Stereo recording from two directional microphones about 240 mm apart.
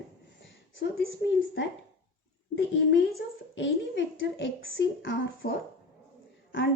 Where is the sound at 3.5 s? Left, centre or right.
Left.